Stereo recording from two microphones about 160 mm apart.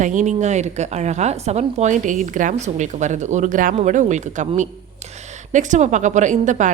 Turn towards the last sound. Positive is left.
turn(degrees=-50)  # may be behind; listen again after turning